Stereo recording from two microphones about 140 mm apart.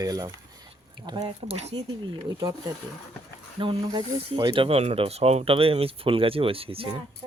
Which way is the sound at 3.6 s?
35° right (ahead or behind).